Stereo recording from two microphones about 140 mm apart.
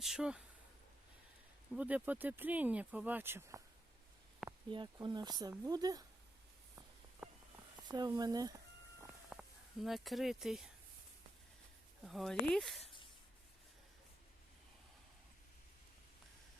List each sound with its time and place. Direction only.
0.0 s speech: 5° right (ahead or behind)
1.7 s speech: 10° right (ahead or behind)
4.7 s speech: 35° right (ahead or behind)
7.2 s walk: 5° right (ahead or behind)
7.9 s speech: 30° right (ahead or behind)
9.3 s speech: 5° right (ahead or behind)
12.0 s speech: centre (ahead or behind)